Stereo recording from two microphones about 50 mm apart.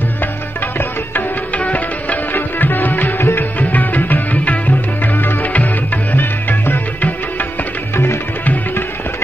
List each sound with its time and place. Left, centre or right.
1.6 s music: left
3.5 s music: left
6.1 s music: left
7.9 s music: left